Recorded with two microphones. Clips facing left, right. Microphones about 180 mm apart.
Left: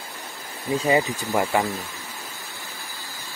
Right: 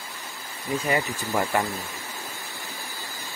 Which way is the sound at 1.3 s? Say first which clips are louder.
Left 3 dB; 15° left (ahead or behind).